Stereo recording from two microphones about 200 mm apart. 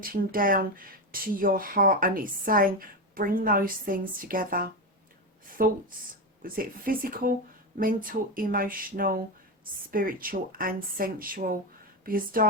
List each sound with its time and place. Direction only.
0.0 s speech: 45° right (ahead or behind)